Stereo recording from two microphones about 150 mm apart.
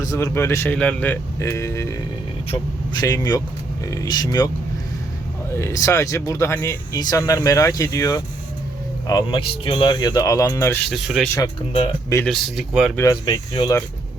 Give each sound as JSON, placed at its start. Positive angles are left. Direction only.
{"t": 0.0, "sound": "speech", "side_deg": 20}
{"t": 5.5, "sound": "speech", "side_deg": 20}
{"t": 10.9, "sound": "speech", "side_deg": 0}
{"t": 13.0, "sound": "speech", "side_deg": 25}